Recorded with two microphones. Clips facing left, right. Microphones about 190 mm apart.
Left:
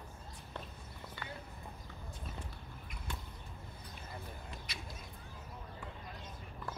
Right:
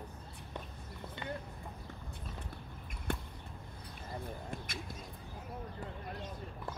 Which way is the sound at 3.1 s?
55° right (ahead or behind).